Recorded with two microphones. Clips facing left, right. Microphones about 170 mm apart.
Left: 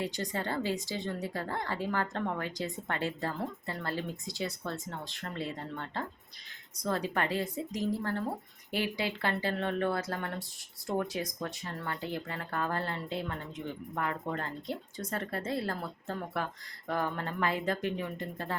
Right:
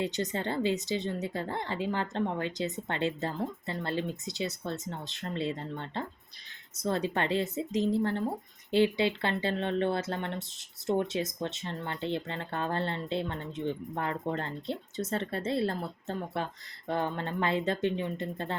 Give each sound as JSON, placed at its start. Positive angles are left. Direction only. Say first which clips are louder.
{"t": 0.0, "sound": "speech", "louder": "right 3 dB", "side_deg": -20}